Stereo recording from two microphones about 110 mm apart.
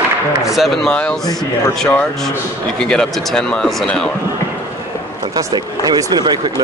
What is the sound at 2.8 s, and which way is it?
Speech, 5° left (ahead or behind).